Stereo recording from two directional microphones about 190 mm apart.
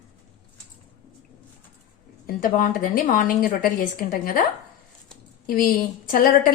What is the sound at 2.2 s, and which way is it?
A woman's voice, 50° left (ahead or behind).